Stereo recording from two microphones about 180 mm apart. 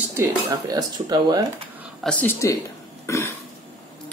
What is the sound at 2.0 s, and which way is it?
Speech, 5° left (ahead or behind).